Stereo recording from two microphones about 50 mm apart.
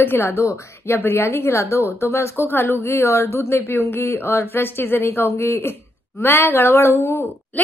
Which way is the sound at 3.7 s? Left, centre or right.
Left.